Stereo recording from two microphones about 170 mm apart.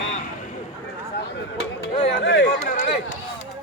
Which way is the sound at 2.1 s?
90° left.